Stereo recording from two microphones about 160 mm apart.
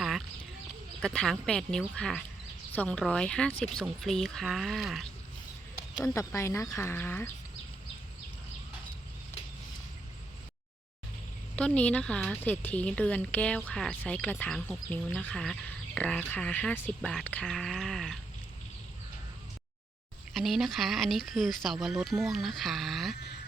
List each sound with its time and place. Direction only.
0.0 s a sound: centre (ahead or behind)
1.0 s speech: 5° left (ahead or behind)
6.1 s speech: 15° left (ahead or behind)
11.5 s speech: 10° left (ahead or behind)
20.3 s speech: centre (ahead or behind)